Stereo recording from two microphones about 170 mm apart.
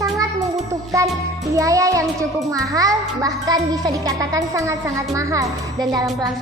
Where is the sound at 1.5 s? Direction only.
20° right (ahead or behind).